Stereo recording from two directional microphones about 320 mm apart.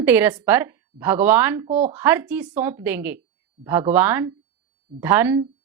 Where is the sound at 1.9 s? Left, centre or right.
Centre.